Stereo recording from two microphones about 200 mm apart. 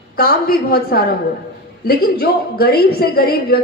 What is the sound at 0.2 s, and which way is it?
A woman's voice, 50° left (ahead or behind).